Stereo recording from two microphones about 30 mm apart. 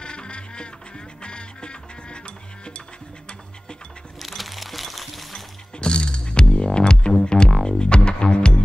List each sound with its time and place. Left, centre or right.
0.0 s music: left
4.2 s music: centre
5.8 s music: left